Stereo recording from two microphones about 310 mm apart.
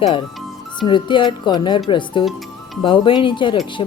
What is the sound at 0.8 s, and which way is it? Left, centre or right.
A woman's voice, centre.